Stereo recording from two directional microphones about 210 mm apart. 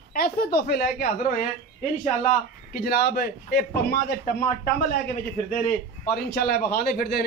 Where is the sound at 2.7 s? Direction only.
45° left (ahead or behind).